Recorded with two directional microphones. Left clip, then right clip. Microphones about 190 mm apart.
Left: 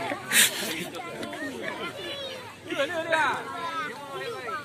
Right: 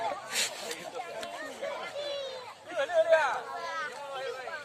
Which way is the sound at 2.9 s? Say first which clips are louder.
Right 3 dB; 65° right (ahead or behind).